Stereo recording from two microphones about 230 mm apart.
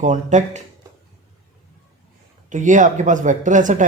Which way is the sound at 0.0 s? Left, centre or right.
Right.